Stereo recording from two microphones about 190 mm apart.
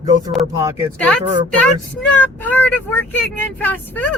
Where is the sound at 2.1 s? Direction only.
10° left (ahead or behind).